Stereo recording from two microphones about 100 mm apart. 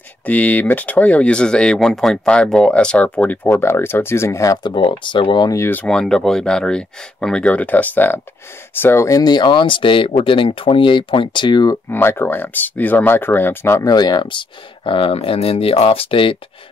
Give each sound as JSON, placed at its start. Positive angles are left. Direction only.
{"t": 0.2, "sound": "speech", "side_deg": 15}
{"t": 3.6, "sound": "speech", "side_deg": 25}
{"t": 4.6, "sound": "speech", "side_deg": 55}
{"t": 5.9, "sound": "speech", "side_deg": 5}
{"t": 11.9, "sound": "speech", "side_deg": 25}
{"t": 13.8, "sound": "speech", "side_deg": 45}